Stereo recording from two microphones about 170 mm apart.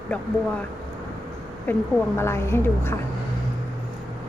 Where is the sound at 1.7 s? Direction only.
10° left (ahead or behind).